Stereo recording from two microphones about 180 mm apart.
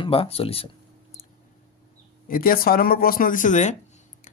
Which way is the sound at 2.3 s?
55° left (ahead or behind).